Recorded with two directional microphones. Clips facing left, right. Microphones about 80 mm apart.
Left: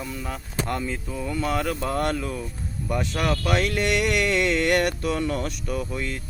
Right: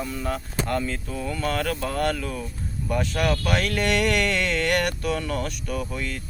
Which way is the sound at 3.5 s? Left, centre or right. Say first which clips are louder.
Left 1 dB; left.